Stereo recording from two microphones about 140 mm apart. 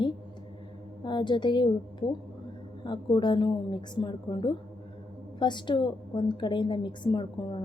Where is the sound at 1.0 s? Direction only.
35° left (ahead or behind).